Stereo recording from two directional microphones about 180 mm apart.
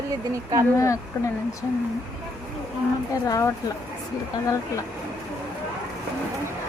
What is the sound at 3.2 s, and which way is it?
Speech, 20° left (ahead or behind).